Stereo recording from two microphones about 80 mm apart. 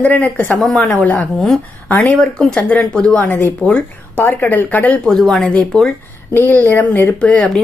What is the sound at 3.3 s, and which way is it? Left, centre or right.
Speech, left.